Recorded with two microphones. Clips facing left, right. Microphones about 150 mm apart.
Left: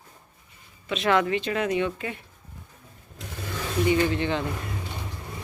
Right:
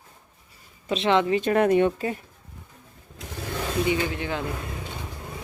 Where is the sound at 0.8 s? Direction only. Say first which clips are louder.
Right 1 dB; 35° right (ahead or behind).